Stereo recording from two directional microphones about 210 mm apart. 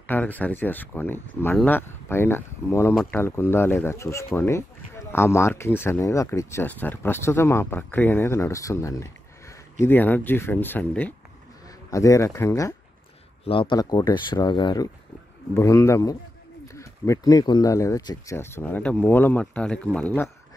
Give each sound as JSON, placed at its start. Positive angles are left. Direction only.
{"t": 0.0, "sound": "speech", "side_deg": 10}